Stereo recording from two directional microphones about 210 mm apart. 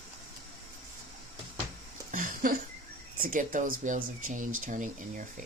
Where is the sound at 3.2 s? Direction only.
40° right (ahead or behind).